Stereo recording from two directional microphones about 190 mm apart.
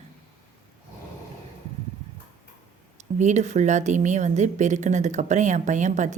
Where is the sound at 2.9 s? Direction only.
40° right (ahead or behind).